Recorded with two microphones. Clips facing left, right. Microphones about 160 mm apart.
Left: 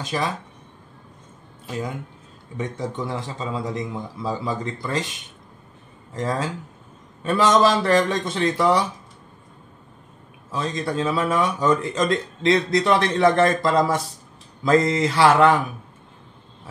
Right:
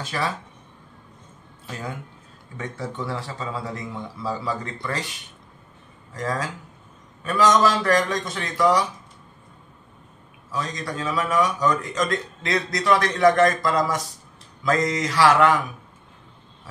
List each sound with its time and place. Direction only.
0.0 s speech: 20° left (ahead or behind)
2.5 s speech: 20° left (ahead or behind)
6.1 s speech: 25° left (ahead or behind)
10.5 s speech: 25° left (ahead or behind)